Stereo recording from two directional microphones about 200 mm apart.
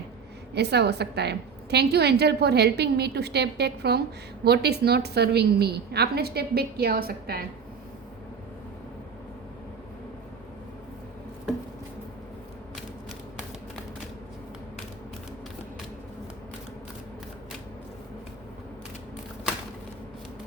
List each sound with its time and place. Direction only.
0.5 s a woman's voice: 55° right (ahead or behind)